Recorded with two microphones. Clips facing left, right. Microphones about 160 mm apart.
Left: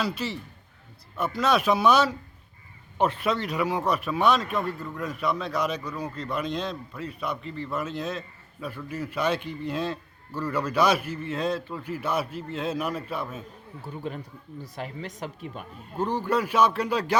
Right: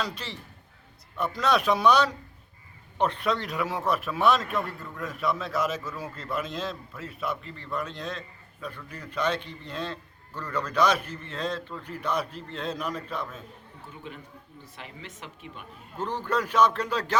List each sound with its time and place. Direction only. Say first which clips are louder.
0.0 s speech: left 5 dB; 5° left (ahead or behind)
13.8 s speech: left 8 dB; 40° left (ahead or behind)
16.0 s speech: left 3 dB; 10° left (ahead or behind)